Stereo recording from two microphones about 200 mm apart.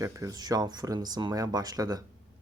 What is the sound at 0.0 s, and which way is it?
Speech, 15° right (ahead or behind).